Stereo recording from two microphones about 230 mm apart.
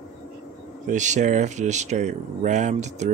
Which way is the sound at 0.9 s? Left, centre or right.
Right.